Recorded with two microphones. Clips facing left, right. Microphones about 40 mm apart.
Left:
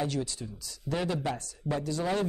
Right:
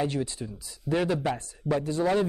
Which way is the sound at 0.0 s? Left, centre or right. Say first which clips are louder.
Right 3 dB; right.